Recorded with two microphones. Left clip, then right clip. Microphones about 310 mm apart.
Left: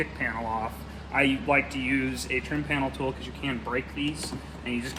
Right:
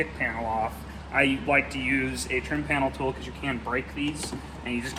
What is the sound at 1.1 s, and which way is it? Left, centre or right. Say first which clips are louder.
A man's voice: right 1 dB; centre.